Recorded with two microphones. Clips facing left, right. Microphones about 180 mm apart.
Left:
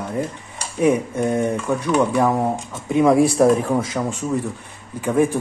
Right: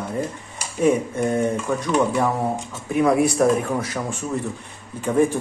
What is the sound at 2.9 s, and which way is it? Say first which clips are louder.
Speech: left 3 dB; 25° left (ahead or behind).